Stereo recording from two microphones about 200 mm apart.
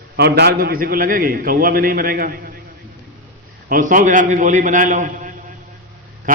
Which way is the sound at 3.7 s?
45° right (ahead or behind).